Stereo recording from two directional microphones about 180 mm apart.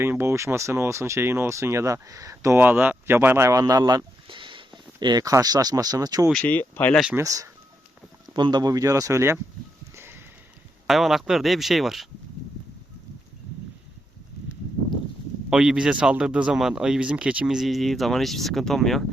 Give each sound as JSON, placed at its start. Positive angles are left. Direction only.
{"t": 0.0, "sound": "speech", "side_deg": -15}
{"t": 6.2, "sound": "speech", "side_deg": 5}
{"t": 7.2, "sound": "speech", "side_deg": -15}
{"t": 9.9, "sound": "a sound", "side_deg": -15}
{"t": 10.8, "sound": "speech", "side_deg": 0}
{"t": 15.4, "sound": "speech", "side_deg": -5}